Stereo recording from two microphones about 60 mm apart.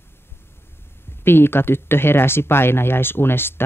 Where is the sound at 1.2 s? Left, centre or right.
Left.